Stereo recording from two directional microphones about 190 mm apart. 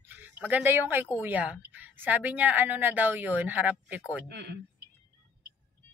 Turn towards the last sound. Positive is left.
turn(degrees=-60)  # may be behind; listen again after turning